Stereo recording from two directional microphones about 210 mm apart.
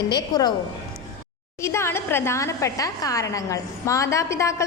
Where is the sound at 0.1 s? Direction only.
20° left (ahead or behind).